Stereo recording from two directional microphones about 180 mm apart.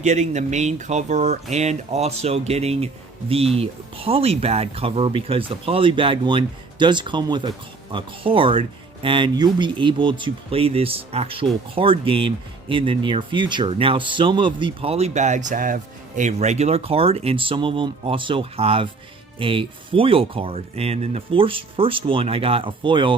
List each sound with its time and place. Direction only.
0.0 s speech: 40° right (ahead or behind)